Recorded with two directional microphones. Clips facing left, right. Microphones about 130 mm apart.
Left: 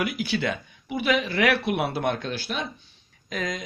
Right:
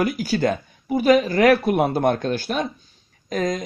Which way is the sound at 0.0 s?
40° right (ahead or behind).